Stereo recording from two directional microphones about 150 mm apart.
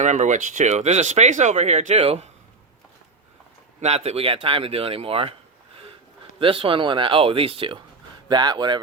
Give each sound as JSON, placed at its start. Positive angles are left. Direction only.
{"t": 0.0, "sound": "speech", "side_deg": -55}
{"t": 3.8, "sound": "speech", "side_deg": -45}
{"t": 6.4, "sound": "speech", "side_deg": -35}